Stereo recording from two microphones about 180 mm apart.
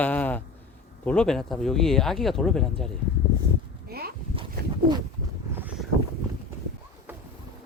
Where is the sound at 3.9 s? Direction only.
60° right (ahead or behind).